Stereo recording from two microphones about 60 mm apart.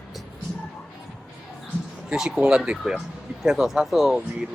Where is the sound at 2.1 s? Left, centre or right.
Centre.